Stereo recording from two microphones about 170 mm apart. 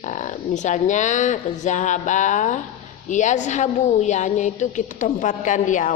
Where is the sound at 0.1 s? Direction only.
45° left (ahead or behind).